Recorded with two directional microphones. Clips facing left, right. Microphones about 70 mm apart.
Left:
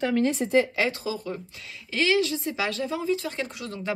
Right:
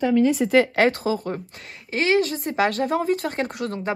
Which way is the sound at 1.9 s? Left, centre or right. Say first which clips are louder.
Right 3 dB; right.